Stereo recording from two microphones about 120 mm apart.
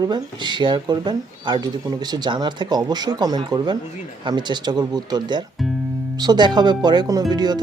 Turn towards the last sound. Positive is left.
turn(degrees=-35)  # may be behind; listen again after turning